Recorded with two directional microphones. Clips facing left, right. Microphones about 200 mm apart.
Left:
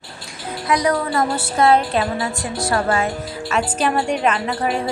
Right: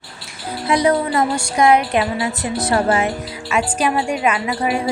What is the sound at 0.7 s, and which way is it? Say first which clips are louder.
Speech: right 3 dB; 25° right (ahead or behind).